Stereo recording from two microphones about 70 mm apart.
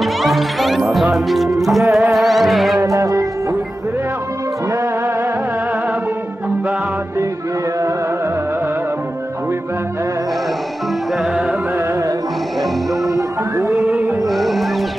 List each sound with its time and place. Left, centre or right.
0.0 s music: centre
2.8 s music: right
13.6 s music: right
14.2 s music: centre